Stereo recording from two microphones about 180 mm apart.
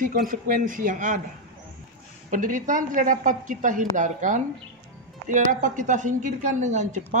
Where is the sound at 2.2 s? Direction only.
50° right (ahead or behind).